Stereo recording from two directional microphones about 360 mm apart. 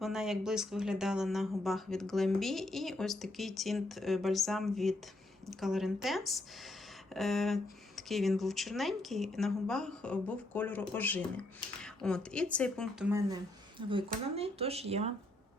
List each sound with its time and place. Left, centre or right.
0.0 s speech: centre